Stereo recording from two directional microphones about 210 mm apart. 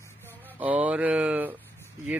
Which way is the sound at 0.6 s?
5° right (ahead or behind).